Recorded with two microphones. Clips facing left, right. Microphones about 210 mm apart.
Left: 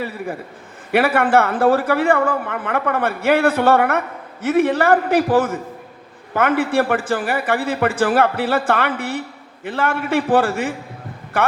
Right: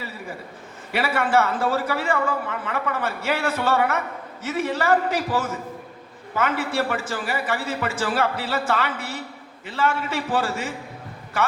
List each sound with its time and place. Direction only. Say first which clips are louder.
0.9 s a man's voice: left 6 dB; 55° left (ahead or behind)